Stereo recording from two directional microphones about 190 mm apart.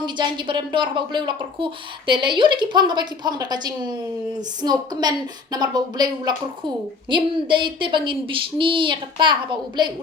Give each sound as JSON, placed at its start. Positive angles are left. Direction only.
{"t": 0.0, "sound": "a woman's voice", "side_deg": -25}